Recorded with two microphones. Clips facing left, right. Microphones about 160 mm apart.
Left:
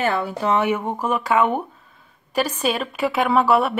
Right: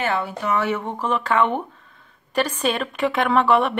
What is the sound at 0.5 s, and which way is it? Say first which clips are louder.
Speech: left 3 dB; 15° left (ahead or behind).